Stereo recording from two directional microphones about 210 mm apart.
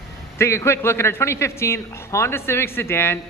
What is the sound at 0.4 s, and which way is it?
A man's voice, 15° left (ahead or behind).